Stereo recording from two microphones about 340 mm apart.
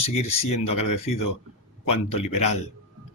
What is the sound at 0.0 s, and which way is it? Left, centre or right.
Speech, centre.